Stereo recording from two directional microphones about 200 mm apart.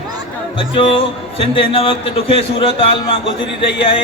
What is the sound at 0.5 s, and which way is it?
Speech, 25° left (ahead or behind).